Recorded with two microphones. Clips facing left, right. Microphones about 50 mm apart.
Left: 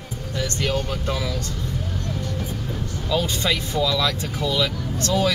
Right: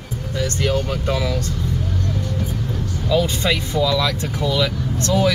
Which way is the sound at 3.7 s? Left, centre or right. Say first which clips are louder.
Right 3 dB; centre.